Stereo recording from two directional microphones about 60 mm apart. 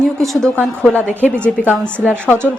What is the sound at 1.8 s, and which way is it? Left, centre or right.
Speech, centre.